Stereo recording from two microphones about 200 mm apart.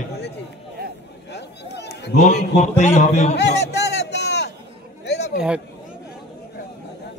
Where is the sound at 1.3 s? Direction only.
60° left (ahead or behind).